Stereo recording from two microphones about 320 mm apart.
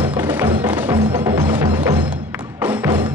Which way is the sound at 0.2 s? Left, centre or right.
Centre.